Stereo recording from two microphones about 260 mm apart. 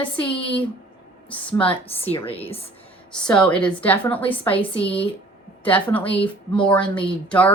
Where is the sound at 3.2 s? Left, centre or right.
Centre.